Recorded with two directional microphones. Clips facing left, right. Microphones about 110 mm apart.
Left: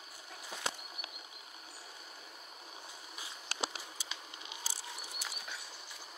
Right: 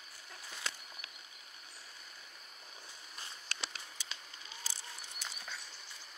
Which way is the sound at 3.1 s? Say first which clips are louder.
Even; 10° left (ahead or behind).